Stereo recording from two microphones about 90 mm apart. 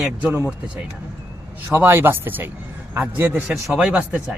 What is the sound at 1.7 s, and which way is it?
Speech, 20° right (ahead or behind).